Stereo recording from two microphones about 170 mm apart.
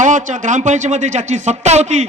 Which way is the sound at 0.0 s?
50° right (ahead or behind).